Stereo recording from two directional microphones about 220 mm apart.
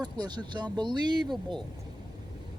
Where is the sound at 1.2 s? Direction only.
Centre (ahead or behind).